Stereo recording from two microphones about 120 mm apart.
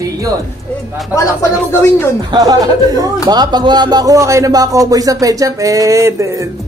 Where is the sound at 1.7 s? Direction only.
20° left (ahead or behind).